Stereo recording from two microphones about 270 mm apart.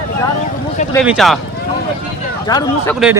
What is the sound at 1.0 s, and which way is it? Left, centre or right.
Speech, centre.